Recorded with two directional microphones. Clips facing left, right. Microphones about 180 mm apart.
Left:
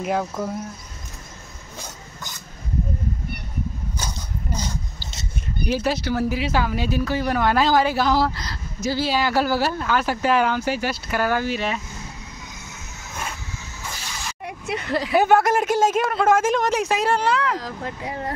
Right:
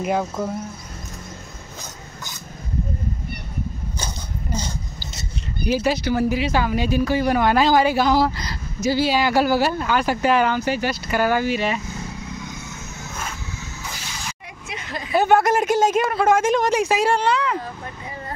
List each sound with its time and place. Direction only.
0.0 s speech: 5° right (ahead or behind)
5.7 s speech: 5° right (ahead or behind)
14.4 s a sound: 65° left (ahead or behind)
15.1 s speech: 5° left (ahead or behind)
17.6 s speech: 90° left